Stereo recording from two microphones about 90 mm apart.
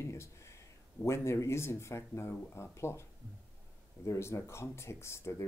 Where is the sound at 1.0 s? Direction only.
30° left (ahead or behind).